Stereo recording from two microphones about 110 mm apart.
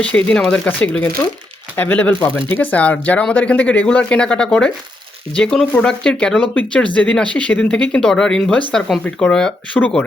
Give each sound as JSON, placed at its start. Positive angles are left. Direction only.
{"t": 0.0, "sound": "speech", "side_deg": 10}